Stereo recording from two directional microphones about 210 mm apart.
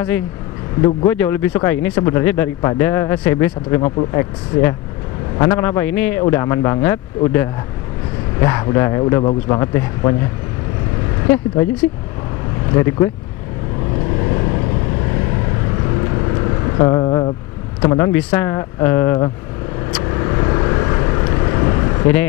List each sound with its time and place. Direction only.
0.8 s speech: 10° left (ahead or behind)
8.4 s speech: 15° left (ahead or behind)
11.3 s speech: 10° left (ahead or behind)
12.7 s speech: 15° left (ahead or behind)
14.2 s vehicle: 25° left (ahead or behind)
16.4 s vehicle: 20° left (ahead or behind)
17.8 s speech: 15° left (ahead or behind)
20.1 s vehicle: 20° left (ahead or behind)